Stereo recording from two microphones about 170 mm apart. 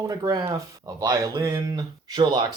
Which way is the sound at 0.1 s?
25° right (ahead or behind).